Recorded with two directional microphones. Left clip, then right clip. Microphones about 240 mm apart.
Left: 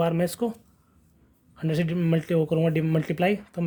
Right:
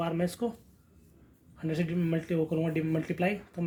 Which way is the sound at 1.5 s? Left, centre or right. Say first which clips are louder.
Left 5 dB; left.